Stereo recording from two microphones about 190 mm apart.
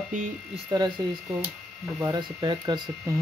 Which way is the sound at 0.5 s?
20° right (ahead or behind).